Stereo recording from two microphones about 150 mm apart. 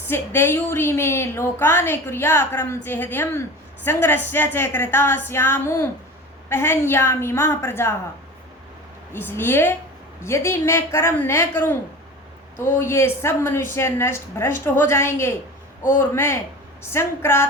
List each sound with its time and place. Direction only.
0.1 s a woman's voice: 15° left (ahead or behind)
9.1 s a woman's voice: 15° left (ahead or behind)
12.8 s a woman's voice: 15° left (ahead or behind)